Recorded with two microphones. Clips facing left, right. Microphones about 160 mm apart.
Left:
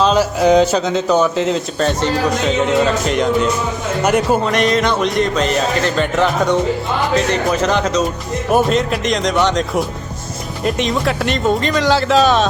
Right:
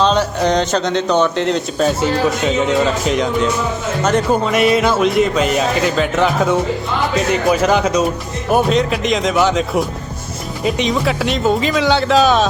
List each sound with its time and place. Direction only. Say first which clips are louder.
0.0 s speech: left 2 dB; 5° left (ahead or behind)
4.4 s speech: right 2 dB; 5° right (ahead or behind)